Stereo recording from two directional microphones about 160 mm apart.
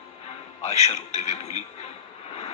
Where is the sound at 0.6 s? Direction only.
40° left (ahead or behind).